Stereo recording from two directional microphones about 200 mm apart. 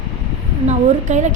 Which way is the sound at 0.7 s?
35° right (ahead or behind).